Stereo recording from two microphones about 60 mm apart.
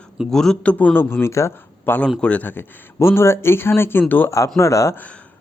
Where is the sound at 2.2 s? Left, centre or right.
Left.